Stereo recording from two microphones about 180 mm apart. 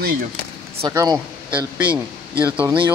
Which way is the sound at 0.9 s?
15° right (ahead or behind).